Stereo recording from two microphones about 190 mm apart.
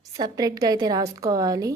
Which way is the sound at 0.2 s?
20° right (ahead or behind).